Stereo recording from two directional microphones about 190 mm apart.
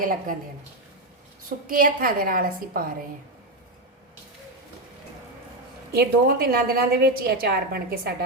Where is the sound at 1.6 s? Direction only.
50° right (ahead or behind).